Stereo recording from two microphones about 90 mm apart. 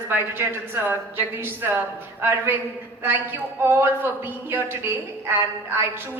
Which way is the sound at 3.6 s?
25° right (ahead or behind).